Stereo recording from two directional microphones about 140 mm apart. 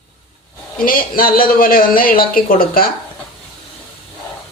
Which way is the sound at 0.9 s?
90° left.